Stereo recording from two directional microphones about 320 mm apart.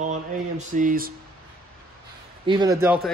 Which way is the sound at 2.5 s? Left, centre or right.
Centre.